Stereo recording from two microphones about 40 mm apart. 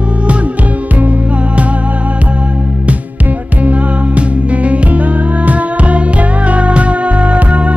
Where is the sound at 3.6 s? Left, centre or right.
Right.